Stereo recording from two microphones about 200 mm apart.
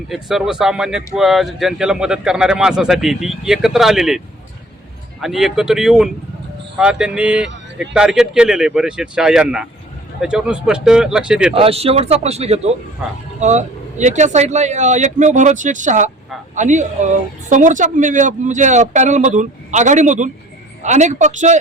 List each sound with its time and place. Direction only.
0.1 s speech: centre (ahead or behind)
5.2 s speech: centre (ahead or behind)
11.5 s speech: 30° right (ahead or behind)